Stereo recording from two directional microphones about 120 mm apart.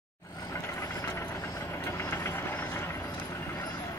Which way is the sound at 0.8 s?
25° left (ahead or behind).